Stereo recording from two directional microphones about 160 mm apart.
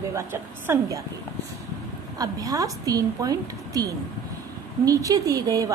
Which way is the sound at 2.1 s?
25° right (ahead or behind).